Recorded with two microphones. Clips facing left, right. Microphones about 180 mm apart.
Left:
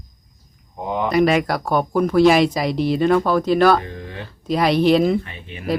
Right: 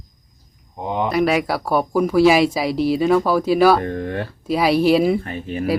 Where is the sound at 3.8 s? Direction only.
50° right (ahead or behind).